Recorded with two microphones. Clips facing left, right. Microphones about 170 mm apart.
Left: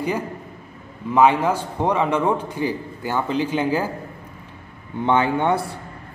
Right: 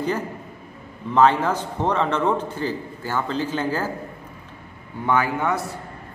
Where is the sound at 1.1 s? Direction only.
10° left (ahead or behind).